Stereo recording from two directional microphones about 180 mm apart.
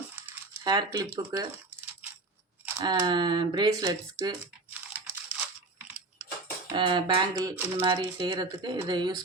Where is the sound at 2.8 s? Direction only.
25° right (ahead or behind).